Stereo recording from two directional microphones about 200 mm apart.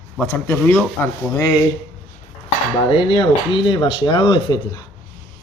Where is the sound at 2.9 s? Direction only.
25° left (ahead or behind).